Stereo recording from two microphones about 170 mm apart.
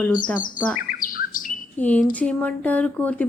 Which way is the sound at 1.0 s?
55° left (ahead or behind).